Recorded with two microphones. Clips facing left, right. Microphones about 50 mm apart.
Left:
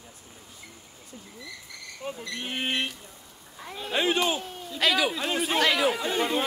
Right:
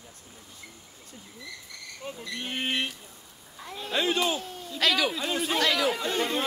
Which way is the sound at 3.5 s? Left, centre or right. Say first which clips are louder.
Left 1 dB; centre.